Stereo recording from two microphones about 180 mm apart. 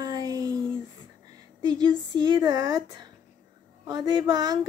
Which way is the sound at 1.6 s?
25° right (ahead or behind).